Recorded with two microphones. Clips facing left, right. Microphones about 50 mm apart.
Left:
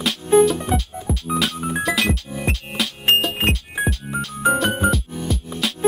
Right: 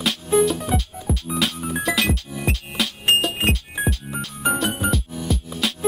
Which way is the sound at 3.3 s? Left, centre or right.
Centre.